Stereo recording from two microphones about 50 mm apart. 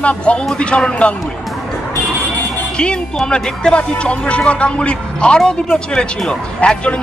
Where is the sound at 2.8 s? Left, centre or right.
Centre.